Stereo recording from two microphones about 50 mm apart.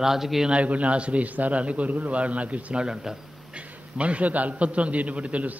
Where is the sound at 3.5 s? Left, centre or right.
Right.